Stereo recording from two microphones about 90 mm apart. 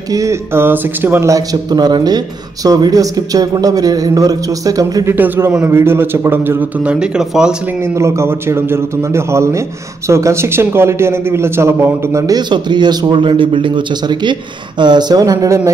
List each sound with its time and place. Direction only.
0.1 s a man's voice: 35° right (ahead or behind)
1.3 s speech: 45° right (ahead or behind)
5.0 s a man's voice: 20° right (ahead or behind)
6.8 s speech: 10° right (ahead or behind)
7.6 s a man's voice: 30° right (ahead or behind)
12.4 s a man's voice: 55° right (ahead or behind); by 15.7 s 35° right (ahead or behind)